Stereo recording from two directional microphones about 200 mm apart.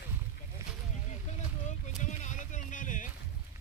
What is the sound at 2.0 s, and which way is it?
Music, 35° left (ahead or behind).